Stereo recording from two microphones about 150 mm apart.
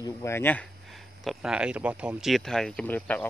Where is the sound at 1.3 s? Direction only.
5° right (ahead or behind).